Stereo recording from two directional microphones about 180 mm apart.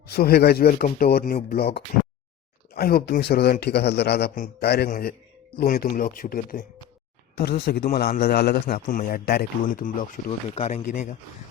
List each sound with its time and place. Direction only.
0.1 s a man's voice: 60° left (ahead or behind)
7.6 s a man's voice: 65° left (ahead or behind)
10.5 s speech: 35° left (ahead or behind)